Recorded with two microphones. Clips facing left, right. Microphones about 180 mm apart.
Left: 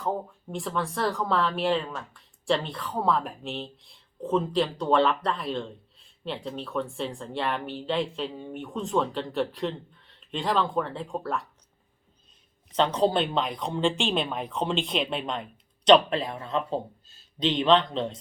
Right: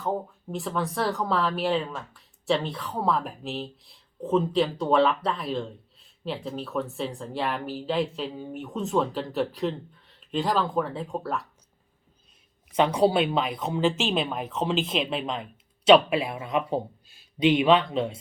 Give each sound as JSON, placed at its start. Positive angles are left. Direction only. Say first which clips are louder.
{"t": 0.0, "sound": "speech", "louder": "right 1 dB", "side_deg": 0}
{"t": 12.7, "sound": "speech", "louder": "right 2 dB", "side_deg": -10}